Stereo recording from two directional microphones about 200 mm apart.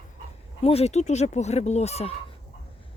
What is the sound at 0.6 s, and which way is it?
Speech, 30° left (ahead or behind).